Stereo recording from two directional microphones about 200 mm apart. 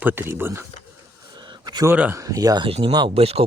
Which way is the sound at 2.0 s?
10° right (ahead or behind).